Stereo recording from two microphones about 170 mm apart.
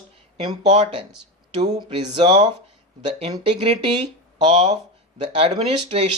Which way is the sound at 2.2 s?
40° right (ahead or behind).